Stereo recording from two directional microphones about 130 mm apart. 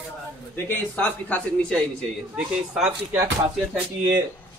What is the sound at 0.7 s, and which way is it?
A man's voice, 15° left (ahead or behind).